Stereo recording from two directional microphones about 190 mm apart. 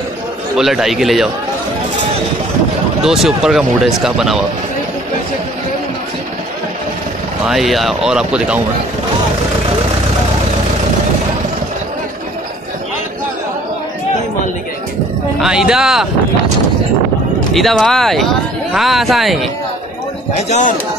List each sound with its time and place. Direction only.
0.6 s speech: centre (ahead or behind)
3.0 s speech: centre (ahead or behind)
7.4 s speech: centre (ahead or behind)
15.4 s speech: 5° right (ahead or behind)
17.6 s speech: centre (ahead or behind)
20.4 s speech: 35° left (ahead or behind)